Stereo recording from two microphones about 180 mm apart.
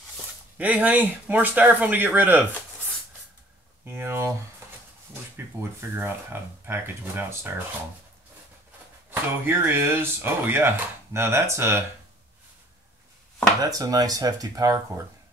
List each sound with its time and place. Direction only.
0.6 s speech: 10° right (ahead or behind)
3.8 s speech: 10° right (ahead or behind)
5.6 s speech: 15° right (ahead or behind)
9.1 s speech: 15° right (ahead or behind)
13.6 s speech: 20° right (ahead or behind)